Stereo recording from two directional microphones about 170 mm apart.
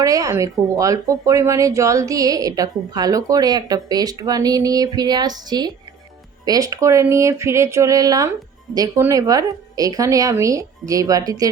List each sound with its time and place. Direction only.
0.0 s speech: 20° right (ahead or behind)